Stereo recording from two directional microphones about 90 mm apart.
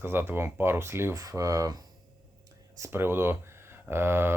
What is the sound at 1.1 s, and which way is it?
Speech, 40° right (ahead or behind).